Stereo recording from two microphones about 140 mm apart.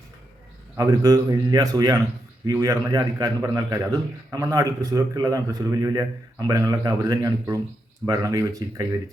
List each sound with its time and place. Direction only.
0.8 s a man's voice: 25° right (ahead or behind)